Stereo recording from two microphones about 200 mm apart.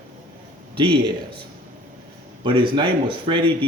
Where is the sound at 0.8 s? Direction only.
25° right (ahead or behind).